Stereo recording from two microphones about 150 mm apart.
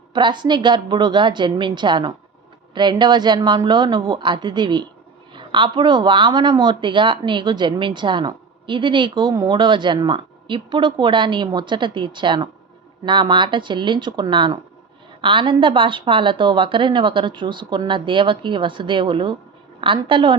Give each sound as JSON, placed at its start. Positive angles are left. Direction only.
{"t": 0.1, "sound": "a woman's voice", "side_deg": -30}